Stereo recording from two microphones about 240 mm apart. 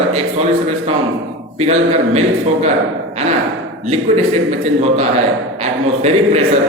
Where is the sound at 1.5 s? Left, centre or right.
Right.